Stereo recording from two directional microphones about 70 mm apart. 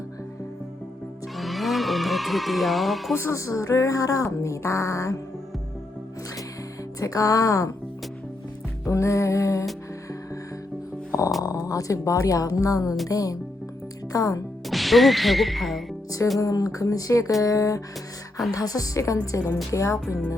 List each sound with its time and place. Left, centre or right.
1.4 s a sound: centre
3.2 s speech: left
7.0 s speech: left
8.8 s music: left
11.4 s speech: left
14.7 s speech: centre
16.4 s speech: left